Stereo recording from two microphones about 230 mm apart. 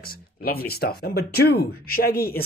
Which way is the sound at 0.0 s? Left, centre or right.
Left.